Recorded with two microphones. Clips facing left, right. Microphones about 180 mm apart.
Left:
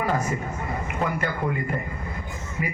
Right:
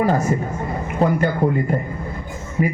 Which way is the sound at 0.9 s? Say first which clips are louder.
Right 10 dB; 35° right (ahead or behind).